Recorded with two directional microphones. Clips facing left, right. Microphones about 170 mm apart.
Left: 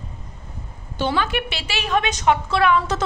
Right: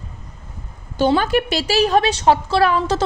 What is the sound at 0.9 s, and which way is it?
A woman's voice, 40° right (ahead or behind).